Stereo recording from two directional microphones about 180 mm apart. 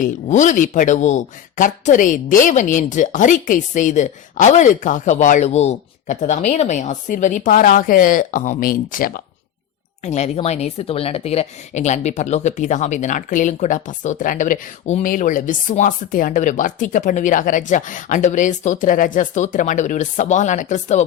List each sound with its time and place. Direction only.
0.0 s a woman's voice: 45° left (ahead or behind)
10.0 s a woman's voice: 40° left (ahead or behind)